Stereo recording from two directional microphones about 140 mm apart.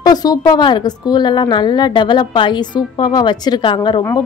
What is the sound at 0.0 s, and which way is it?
A woman's voice, 30° left (ahead or behind).